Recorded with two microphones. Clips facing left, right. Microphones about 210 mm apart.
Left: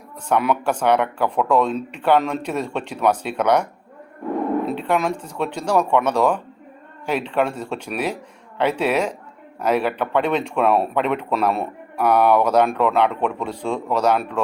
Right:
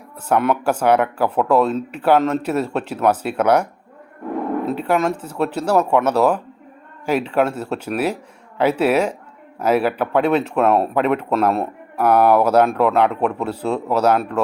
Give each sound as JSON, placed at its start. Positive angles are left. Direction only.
{"t": 0.3, "sound": "speech", "side_deg": -5}